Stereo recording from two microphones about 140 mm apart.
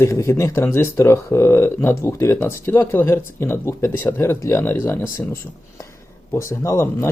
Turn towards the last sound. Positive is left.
turn(degrees=20)  # may be behind; listen again after turning